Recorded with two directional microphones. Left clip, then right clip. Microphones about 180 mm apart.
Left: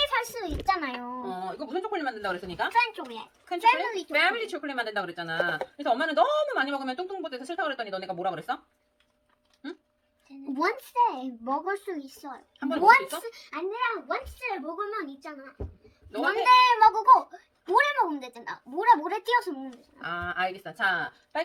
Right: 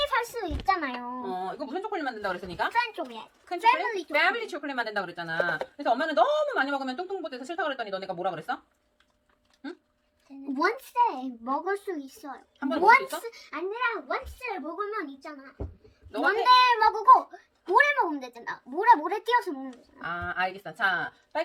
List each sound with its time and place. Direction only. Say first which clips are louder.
0.0 s speech: even; 10° right (ahead or behind)
2.7 s speech: left 4 dB; 10° left (ahead or behind)
4.1 s speech: even; 20° right (ahead or behind)
10.5 s speech: right 1 dB; 10° right (ahead or behind)
12.5 s a child's voice: even; 20° right (ahead or behind)
12.8 s a child's voice: left 1 dB; 5° right (ahead or behind)
20.0 s speech: even; 15° right (ahead or behind)